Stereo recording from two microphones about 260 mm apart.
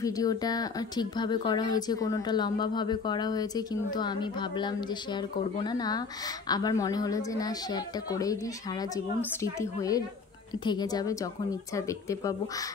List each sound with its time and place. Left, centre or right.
0.0 s speech: centre